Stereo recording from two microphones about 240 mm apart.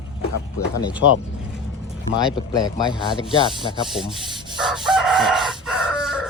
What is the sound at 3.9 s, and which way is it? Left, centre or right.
Fowl, centre.